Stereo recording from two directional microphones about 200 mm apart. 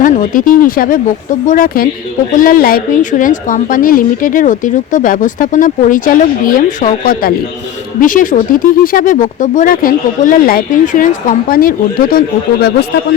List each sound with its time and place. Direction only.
0.0 s a woman's voice: 45° left (ahead or behind)